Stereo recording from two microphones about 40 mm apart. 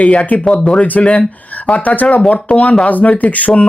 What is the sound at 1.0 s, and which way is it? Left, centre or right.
Speech, left.